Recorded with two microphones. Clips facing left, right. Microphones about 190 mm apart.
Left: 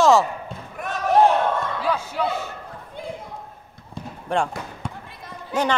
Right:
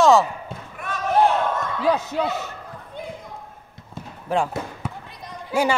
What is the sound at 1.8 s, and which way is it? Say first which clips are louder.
Speech: right 5 dB; 40° right (ahead or behind).